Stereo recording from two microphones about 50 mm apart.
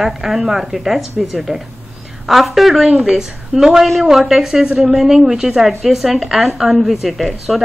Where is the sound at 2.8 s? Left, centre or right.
Centre.